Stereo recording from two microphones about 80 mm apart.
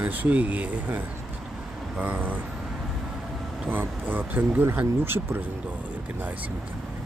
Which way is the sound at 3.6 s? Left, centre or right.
Right.